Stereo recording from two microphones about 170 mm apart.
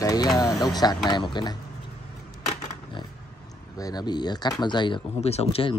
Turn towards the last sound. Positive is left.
turn(degrees=35)  # may be behind; listen again after turning